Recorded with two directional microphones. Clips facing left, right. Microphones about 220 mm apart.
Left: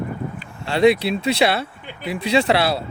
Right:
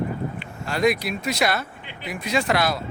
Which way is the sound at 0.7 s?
30° left (ahead or behind).